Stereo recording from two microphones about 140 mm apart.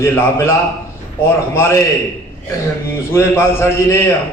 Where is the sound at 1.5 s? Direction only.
20° left (ahead or behind).